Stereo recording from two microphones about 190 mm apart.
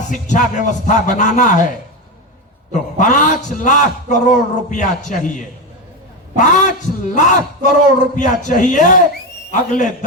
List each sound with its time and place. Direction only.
0.1 s a man's voice: 40° left (ahead or behind)
3.0 s a man's voice: 40° left (ahead or behind)
6.3 s a man's voice: 40° left (ahead or behind)